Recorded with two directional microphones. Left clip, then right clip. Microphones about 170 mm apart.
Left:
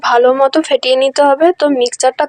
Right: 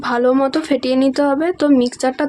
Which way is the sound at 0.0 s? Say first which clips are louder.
Left 6 dB; 45° left (ahead or behind).